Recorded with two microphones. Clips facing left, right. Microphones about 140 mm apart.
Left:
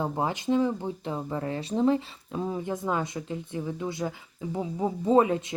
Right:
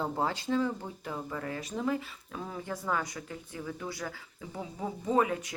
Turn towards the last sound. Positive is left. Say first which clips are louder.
# left 6 dB
turn(degrees=25)  # may be behind; listen again after turning